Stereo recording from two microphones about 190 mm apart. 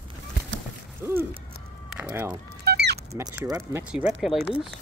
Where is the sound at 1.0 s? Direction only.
10° right (ahead or behind).